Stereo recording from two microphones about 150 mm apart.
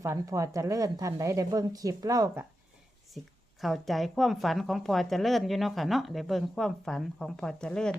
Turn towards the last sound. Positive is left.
turn(degrees=5)  # may be behind; listen again after turning